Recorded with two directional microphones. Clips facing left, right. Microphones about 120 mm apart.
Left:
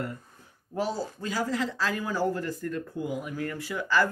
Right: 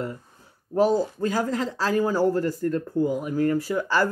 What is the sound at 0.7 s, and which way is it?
Speech, 45° right (ahead or behind).